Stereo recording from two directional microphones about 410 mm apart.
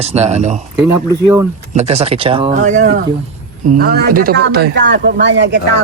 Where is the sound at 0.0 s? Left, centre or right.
Centre.